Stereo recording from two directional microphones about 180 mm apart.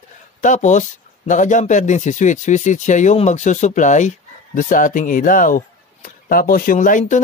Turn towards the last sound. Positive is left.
turn(degrees=45)  # may be behind; listen again after turning